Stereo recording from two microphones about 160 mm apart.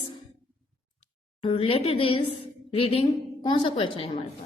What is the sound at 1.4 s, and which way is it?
A woman's voice, 35° left (ahead or behind).